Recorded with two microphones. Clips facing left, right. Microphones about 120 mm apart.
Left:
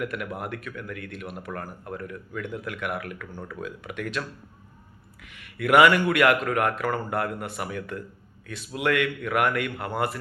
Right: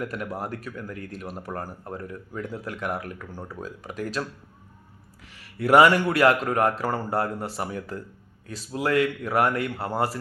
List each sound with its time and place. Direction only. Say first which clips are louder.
0.0 s speech: even; 35° right (ahead or behind)